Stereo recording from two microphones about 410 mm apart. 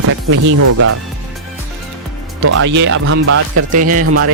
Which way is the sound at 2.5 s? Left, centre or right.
Right.